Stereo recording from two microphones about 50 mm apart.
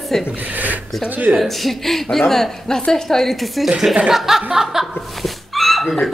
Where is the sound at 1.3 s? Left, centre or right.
Centre.